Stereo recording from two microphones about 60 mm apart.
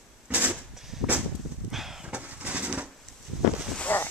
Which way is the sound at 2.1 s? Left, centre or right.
Right.